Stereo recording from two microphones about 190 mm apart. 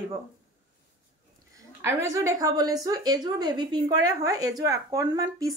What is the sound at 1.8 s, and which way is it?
A woman's voice, 15° right (ahead or behind).